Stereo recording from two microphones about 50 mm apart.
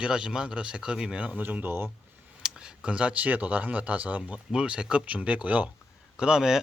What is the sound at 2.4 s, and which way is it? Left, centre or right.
Speech, centre.